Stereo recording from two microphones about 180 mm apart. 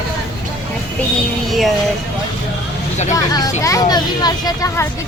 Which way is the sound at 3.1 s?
20° left (ahead or behind).